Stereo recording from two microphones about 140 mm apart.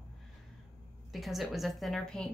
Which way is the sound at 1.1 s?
Centre (ahead or behind).